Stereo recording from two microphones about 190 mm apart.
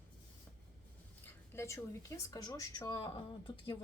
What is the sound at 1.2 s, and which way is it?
Speech, 15° left (ahead or behind).